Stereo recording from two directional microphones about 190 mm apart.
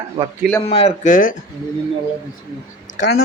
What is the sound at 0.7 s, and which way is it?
Speech, 30° left (ahead or behind).